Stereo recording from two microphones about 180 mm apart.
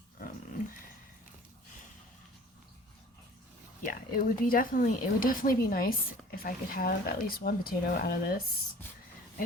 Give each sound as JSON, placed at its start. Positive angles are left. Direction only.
{"t": 3.8, "sound": "speech", "side_deg": 50}